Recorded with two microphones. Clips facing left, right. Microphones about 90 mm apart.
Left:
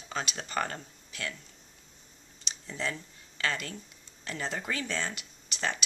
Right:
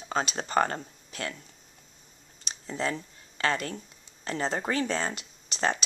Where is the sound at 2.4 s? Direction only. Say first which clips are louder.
Right 4 dB; 35° right (ahead or behind).